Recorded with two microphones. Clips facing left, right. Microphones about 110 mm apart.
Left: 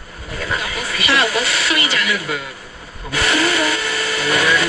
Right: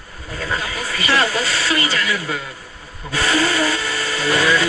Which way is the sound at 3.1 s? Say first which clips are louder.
Even; 30° right (ahead or behind).